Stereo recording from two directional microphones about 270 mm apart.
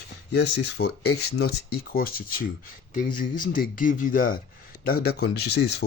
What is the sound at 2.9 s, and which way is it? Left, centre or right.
Speech, left.